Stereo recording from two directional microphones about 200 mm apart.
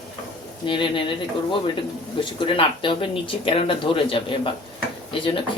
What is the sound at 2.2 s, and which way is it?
Speech, 25° left (ahead or behind).